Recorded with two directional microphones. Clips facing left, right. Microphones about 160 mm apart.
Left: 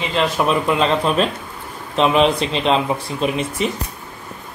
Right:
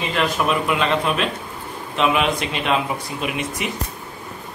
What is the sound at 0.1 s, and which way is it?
A man's voice, 30° left (ahead or behind).